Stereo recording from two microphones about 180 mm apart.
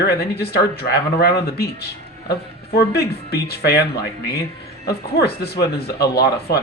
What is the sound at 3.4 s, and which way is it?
Speech, 65° left (ahead or behind).